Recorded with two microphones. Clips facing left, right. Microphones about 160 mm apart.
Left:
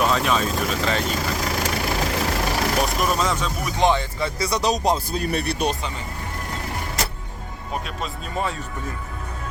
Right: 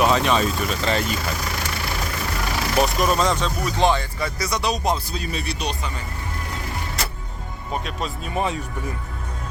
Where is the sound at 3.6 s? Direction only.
20° left (ahead or behind); by 5.7 s 60° left (ahead or behind).